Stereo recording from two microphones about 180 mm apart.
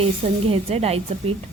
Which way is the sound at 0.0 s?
35° right (ahead or behind).